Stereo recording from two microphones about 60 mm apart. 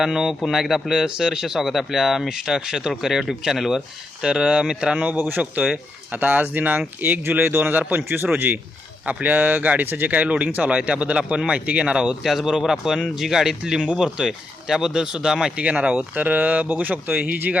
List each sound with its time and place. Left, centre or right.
0.0 s speech: centre
5.1 s a man's voice: right
5.4 s a man's voice: centre
12.2 s speech: centre; by 17.3 s right